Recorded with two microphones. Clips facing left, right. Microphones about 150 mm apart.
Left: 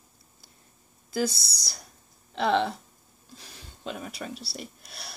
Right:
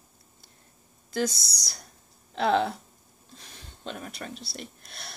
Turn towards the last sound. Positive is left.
turn(degrees=0)  # may be behind; listen again after turning